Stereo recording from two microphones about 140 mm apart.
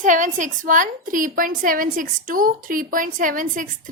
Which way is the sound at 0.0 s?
65° right (ahead or behind).